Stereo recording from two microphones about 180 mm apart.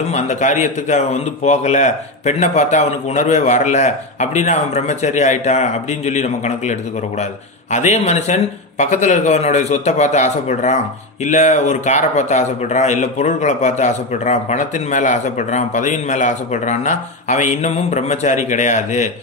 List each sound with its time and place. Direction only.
0.1 s speech: 40° left (ahead or behind)